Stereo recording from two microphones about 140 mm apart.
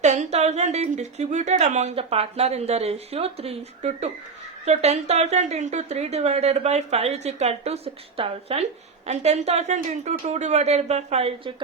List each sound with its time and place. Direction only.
0.0 s a woman's voice: 55° right (ahead or behind)